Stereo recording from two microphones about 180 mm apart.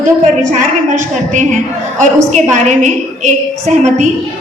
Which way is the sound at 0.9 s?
45° right (ahead or behind).